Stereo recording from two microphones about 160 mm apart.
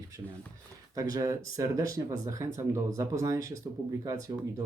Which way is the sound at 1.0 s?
20° right (ahead or behind).